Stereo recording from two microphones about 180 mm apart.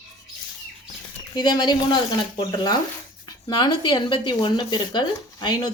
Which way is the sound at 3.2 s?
25° left (ahead or behind).